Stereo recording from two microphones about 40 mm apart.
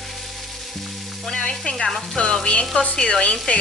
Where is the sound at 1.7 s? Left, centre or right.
Centre.